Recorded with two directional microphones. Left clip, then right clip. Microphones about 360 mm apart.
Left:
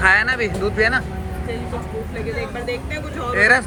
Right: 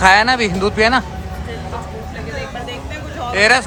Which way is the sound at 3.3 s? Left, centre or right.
Centre.